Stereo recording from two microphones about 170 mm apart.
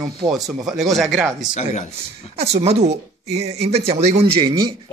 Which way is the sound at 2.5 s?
40° right (ahead or behind).